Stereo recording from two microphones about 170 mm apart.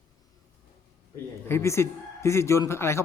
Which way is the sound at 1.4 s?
15° left (ahead or behind).